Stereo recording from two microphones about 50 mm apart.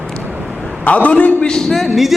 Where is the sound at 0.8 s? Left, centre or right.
Left.